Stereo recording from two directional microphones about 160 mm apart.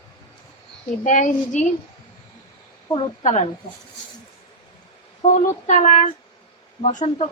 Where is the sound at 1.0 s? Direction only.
50° left (ahead or behind).